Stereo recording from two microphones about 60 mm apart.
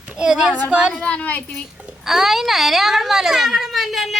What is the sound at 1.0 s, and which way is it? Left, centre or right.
Speech, left.